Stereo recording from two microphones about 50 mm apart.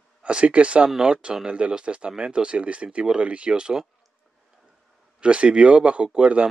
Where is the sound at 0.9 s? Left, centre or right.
Centre.